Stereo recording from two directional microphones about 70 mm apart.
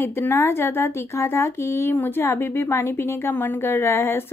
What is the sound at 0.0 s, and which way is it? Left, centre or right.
A woman's voice, left.